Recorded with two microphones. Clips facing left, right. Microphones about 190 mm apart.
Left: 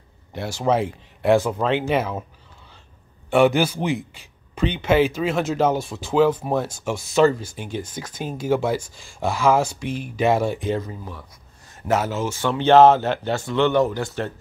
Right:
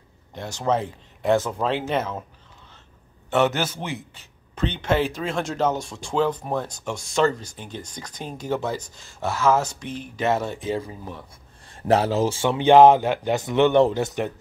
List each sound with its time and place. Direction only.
0.3 s a man's voice: 5° left (ahead or behind)
3.3 s a man's voice: 10° left (ahead or behind)
10.6 s speech: 5° right (ahead or behind)
10.9 s speech: 20° right (ahead or behind)
11.7 s speech: 30° right (ahead or behind)
12.4 s speech: 15° right (ahead or behind)